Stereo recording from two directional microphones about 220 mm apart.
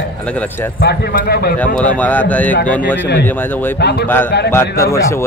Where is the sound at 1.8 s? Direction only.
5° left (ahead or behind).